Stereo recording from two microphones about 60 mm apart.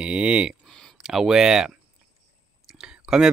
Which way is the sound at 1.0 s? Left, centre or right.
Centre.